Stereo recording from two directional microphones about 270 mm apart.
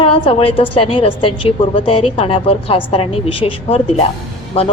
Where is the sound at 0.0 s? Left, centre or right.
Left.